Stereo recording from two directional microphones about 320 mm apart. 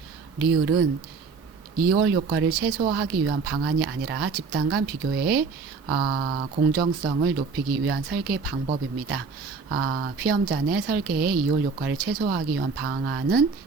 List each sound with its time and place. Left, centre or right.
0.5 s speech: right